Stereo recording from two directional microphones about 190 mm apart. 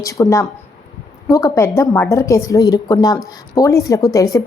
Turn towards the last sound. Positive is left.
turn(degrees=15)  # may be behind; listen again after turning